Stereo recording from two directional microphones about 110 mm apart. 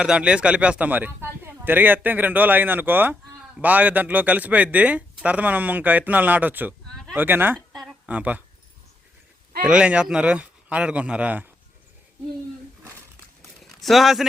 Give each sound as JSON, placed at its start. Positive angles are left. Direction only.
{"t": 0.0, "sound": "speech", "side_deg": -10}
{"t": 7.9, "sound": "a sound", "side_deg": -15}
{"t": 9.6, "sound": "speech", "side_deg": -10}
{"t": 13.8, "sound": "speech", "side_deg": 0}